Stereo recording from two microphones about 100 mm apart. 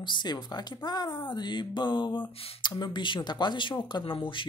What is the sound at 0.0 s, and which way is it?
Speech, 50° left (ahead or behind).